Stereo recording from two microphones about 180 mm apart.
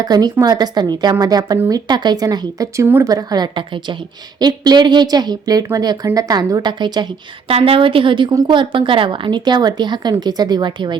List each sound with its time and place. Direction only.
0.0 s a woman's voice: 20° right (ahead or behind)